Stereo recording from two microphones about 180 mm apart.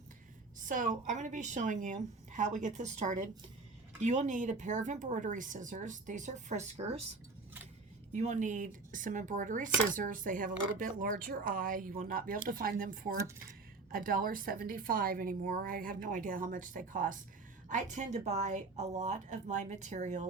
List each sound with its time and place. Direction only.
0.6 s speech: 45° right (ahead or behind)
8.1 s speech: 40° right (ahead or behind)